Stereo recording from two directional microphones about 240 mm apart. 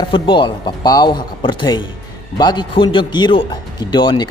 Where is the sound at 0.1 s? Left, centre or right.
Centre.